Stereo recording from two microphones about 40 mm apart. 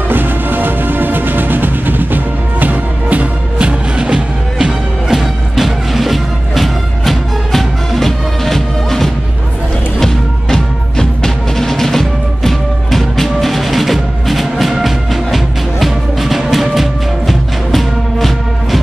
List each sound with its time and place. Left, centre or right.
0.1 s music: right
4.6 s music: centre